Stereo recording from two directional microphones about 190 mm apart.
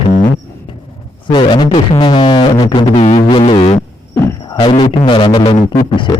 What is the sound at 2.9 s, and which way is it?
Music, 35° left (ahead or behind).